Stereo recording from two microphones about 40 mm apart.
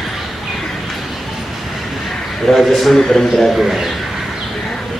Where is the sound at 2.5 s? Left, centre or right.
Centre.